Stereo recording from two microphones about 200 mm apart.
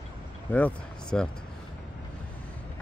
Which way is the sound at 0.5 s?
5° left (ahead or behind).